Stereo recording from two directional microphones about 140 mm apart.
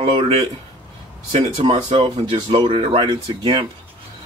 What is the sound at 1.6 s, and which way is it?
Speech, 45° right (ahead or behind).